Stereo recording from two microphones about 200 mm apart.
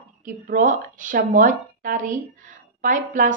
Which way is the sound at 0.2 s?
40° right (ahead or behind).